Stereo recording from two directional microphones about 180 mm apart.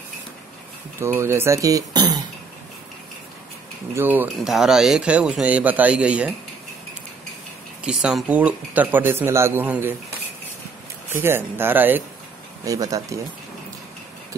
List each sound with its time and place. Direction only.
0.9 s speech: 15° right (ahead or behind)
3.9 s speech: 10° right (ahead or behind)
7.8 s speech: 5° right (ahead or behind)
11.1 s speech: 10° right (ahead or behind)